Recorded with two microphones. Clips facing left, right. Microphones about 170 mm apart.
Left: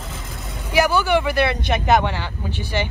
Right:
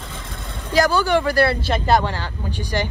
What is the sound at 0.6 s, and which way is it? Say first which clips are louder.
Speech: even; 15° left (ahead or behind).